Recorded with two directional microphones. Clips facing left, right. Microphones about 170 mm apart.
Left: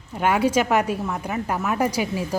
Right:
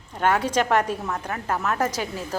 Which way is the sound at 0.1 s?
10° left (ahead or behind).